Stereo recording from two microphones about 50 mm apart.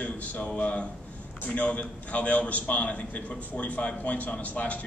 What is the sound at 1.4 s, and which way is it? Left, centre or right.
A man's voice, left.